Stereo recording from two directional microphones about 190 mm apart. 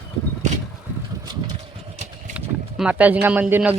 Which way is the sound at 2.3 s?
5° right (ahead or behind).